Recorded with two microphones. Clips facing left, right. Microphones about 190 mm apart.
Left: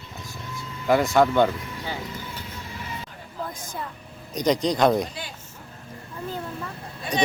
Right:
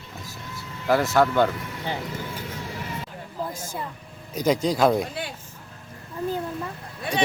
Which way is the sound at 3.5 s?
10° right (ahead or behind).